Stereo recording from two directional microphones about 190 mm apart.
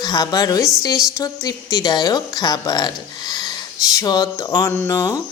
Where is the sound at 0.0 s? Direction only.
20° left (ahead or behind).